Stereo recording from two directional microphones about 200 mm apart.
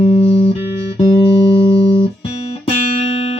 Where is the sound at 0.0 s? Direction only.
30° left (ahead or behind).